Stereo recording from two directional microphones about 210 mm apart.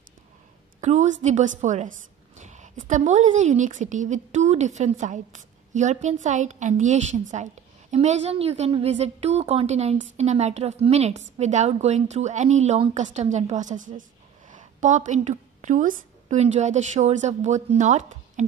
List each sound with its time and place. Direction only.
0.7 s a woman's voice: 35° right (ahead or behind)